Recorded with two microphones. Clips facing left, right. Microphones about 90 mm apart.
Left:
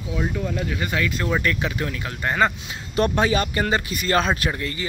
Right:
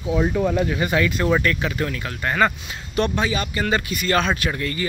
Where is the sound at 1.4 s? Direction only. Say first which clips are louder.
Right 2 dB; 15° left (ahead or behind).